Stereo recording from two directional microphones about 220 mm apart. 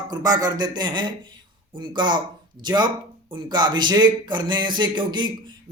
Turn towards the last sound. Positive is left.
turn(degrees=-20)  # may be behind; listen again after turning